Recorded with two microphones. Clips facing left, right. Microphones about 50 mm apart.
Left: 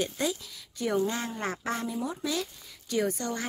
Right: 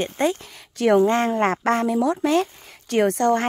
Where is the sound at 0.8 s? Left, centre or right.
Right.